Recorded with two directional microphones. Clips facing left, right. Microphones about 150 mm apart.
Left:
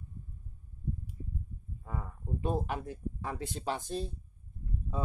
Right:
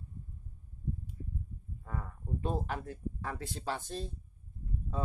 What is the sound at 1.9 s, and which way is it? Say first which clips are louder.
Speech: left 1 dB; 15° left (ahead or behind).